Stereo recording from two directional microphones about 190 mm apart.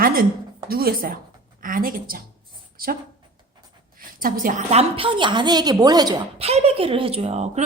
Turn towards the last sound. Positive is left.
turn(degrees=-35)  # may be behind; listen again after turning